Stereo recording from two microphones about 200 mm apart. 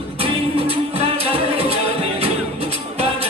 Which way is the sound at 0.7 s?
30° right (ahead or behind).